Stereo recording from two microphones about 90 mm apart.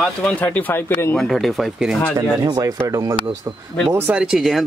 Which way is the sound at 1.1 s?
Centre (ahead or behind).